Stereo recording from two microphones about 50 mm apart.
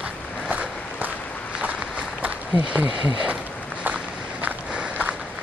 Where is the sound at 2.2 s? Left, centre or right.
Right.